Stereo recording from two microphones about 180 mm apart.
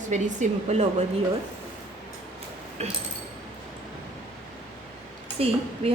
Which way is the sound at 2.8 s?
35° right (ahead or behind).